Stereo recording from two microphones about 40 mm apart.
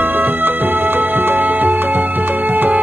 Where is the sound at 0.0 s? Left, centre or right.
Right.